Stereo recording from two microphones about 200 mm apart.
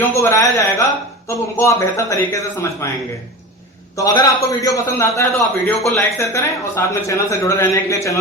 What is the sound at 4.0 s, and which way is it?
Speech, 15° left (ahead or behind).